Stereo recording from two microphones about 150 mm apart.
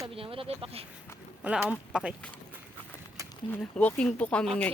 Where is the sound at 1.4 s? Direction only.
10° right (ahead or behind).